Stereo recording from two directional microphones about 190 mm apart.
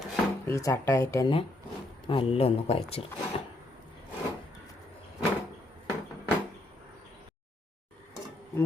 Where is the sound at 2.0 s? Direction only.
30° left (ahead or behind).